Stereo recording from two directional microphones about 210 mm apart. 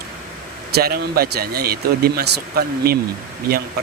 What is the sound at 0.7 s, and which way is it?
Speech, 45° right (ahead or behind).